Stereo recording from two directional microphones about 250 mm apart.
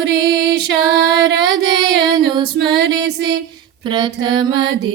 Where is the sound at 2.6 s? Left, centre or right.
Right.